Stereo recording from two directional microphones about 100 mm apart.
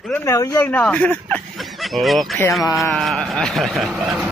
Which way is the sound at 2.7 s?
Centre (ahead or behind).